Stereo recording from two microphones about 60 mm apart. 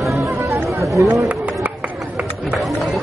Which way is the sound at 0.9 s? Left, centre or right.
Right.